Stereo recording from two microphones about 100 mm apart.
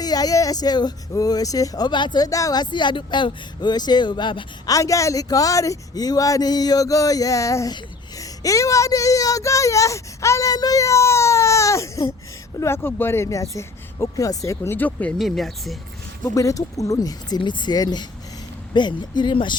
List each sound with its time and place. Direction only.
0.0 s speech: 40° left (ahead or behind)
4.7 s speech: 30° left (ahead or behind); by 15.1 s 15° left (ahead or behind)
15.2 s speech: centre (ahead or behind)
16.2 s speech: 35° left (ahead or behind); by 19.5 s 55° left (ahead or behind)